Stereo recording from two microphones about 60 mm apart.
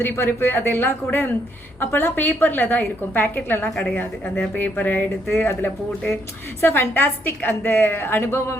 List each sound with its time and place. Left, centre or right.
0.0 s speech: left
8.2 s speech: left